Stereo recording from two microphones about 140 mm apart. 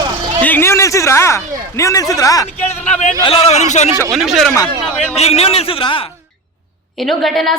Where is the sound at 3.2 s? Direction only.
45° left (ahead or behind).